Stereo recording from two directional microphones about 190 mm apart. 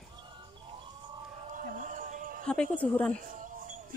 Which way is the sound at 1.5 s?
40° right (ahead or behind).